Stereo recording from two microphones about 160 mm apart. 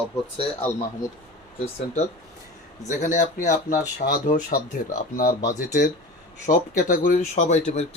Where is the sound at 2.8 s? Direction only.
55° left (ahead or behind).